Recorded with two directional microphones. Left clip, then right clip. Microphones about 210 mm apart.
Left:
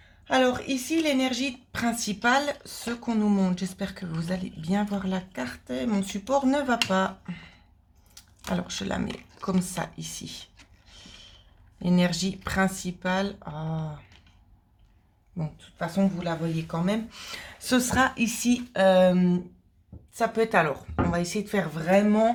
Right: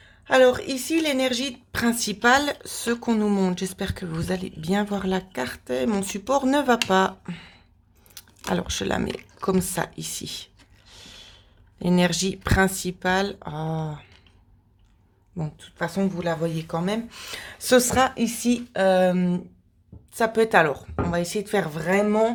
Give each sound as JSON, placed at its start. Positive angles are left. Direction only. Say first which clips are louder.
{"t": 0.3, "sound": "speech", "louder": "right 6 dB", "side_deg": -40}
{"t": 10.9, "sound": "a sound", "louder": "right 3 dB", "side_deg": -35}
{"t": 11.8, "sound": "speech", "louder": "right 4 dB", "side_deg": -30}
{"t": 15.4, "sound": "speech", "louder": "right 3 dB", "side_deg": -25}
{"t": 15.6, "sound": "speech", "louder": "right 1 dB", "side_deg": -45}
{"t": 20.1, "sound": "speech", "louder": "right 4 dB", "side_deg": -35}